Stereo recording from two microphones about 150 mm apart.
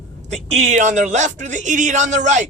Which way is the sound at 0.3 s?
50° right (ahead or behind).